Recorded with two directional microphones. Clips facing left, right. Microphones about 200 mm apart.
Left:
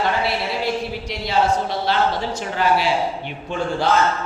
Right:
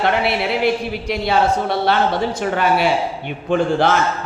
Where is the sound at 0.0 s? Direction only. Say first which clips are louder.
Right 4 dB; 65° right (ahead or behind).